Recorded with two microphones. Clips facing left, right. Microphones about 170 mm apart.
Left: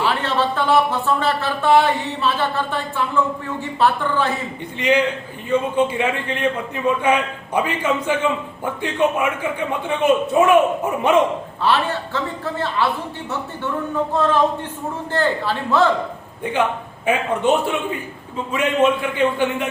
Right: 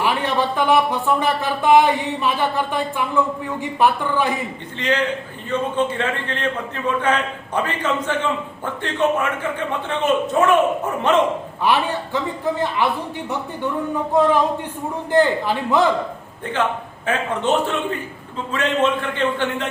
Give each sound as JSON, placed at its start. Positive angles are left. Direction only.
{"t": 0.0, "sound": "speech", "side_deg": -15}
{"t": 4.8, "sound": "a man's voice", "side_deg": 10}
{"t": 11.6, "sound": "speech", "side_deg": -15}
{"t": 14.1, "sound": "speech", "side_deg": -15}
{"t": 16.4, "sound": "a man's voice", "side_deg": 15}